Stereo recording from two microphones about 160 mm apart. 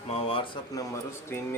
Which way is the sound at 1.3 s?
15° left (ahead or behind).